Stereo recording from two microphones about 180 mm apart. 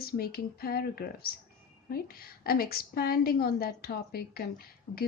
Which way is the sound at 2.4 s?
55° left (ahead or behind).